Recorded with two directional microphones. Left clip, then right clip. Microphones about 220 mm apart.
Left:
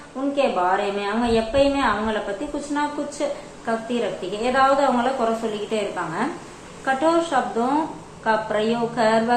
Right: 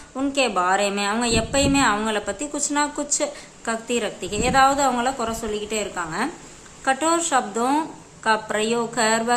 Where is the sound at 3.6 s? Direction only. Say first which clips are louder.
Even; 35° right (ahead or behind).